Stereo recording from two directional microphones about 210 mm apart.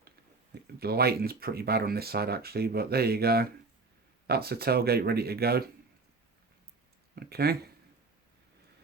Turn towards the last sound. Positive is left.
turn(degrees=-50)  # may be behind; listen again after turning